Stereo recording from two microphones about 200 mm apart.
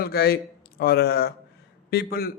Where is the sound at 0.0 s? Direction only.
50° left (ahead or behind).